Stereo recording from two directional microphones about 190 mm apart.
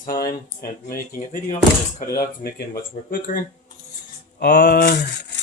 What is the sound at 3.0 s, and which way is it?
Speech, 45° left (ahead or behind).